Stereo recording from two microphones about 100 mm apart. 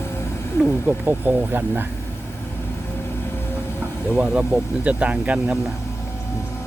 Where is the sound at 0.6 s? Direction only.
15° right (ahead or behind).